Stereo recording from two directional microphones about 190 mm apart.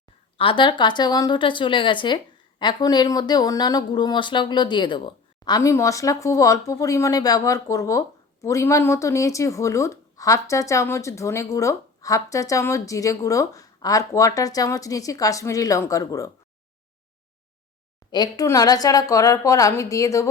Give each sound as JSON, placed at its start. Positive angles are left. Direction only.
{"t": 0.3, "sound": "a woman's voice", "side_deg": 25}
{"t": 18.1, "sound": "a woman's voice", "side_deg": 20}